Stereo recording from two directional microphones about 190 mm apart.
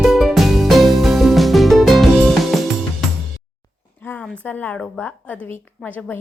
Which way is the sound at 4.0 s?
10° left (ahead or behind).